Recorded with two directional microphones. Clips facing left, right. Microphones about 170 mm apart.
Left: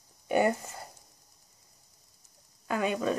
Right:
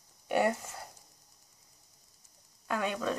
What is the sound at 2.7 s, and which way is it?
Speech, 5° left (ahead or behind).